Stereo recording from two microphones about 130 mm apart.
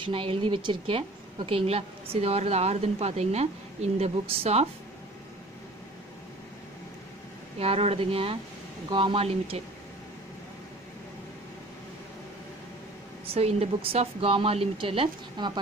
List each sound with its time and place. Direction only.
0.0 s a woman's voice: 45° right (ahead or behind)
7.5 s a woman's voice: 50° right (ahead or behind)
13.3 s a woman's voice: 50° right (ahead or behind); by 15.6 s 35° right (ahead or behind)